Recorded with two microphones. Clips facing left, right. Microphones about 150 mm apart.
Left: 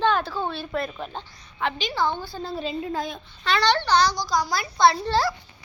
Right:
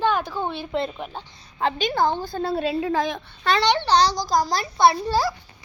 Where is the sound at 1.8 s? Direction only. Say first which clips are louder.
Right 4 dB; 50° right (ahead or behind).